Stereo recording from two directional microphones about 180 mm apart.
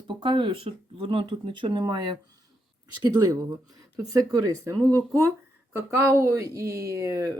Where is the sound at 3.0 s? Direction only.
20° right (ahead or behind).